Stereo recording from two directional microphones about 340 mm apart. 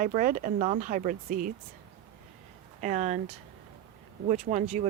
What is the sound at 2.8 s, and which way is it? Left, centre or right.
Speech, right.